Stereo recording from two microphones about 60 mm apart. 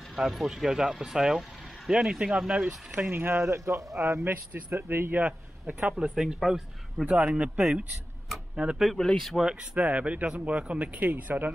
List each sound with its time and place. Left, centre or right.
0.1 s speech: centre
3.1 s speech: right
4.2 s speech: right
5.7 s speech: right
7.1 s speech: right
8.9 s speech: centre
9.4 s speech: centre
9.8 s speech: right